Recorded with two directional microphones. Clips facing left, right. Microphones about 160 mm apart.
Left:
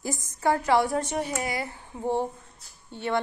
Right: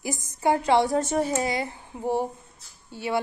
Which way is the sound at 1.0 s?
40° right (ahead or behind).